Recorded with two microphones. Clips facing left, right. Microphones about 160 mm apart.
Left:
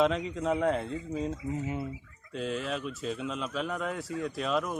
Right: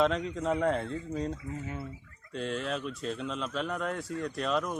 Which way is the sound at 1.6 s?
20° left (ahead or behind).